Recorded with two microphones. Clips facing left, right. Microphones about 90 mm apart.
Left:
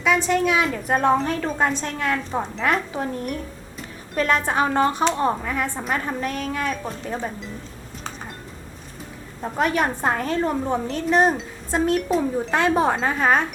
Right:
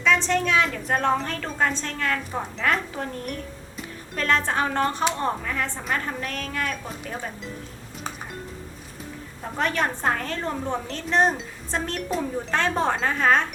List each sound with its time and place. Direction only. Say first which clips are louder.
0.0 s speech: left 2 dB; 10° left (ahead or behind)
9.6 s speech: left 3 dB; 10° left (ahead or behind)